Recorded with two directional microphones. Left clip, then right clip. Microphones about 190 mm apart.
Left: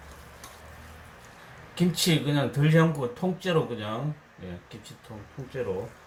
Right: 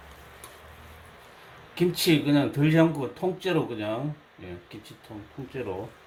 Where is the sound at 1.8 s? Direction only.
30° right (ahead or behind).